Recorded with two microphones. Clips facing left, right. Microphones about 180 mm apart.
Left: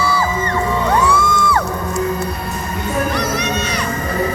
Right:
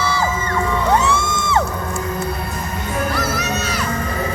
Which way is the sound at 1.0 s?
25° right (ahead or behind).